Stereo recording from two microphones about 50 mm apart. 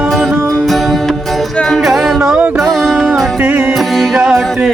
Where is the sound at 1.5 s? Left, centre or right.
Centre.